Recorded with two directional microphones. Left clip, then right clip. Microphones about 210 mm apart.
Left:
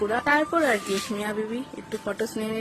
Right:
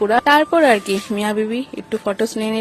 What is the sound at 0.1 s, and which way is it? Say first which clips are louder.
Speech: right 11 dB; 40° right (ahead or behind).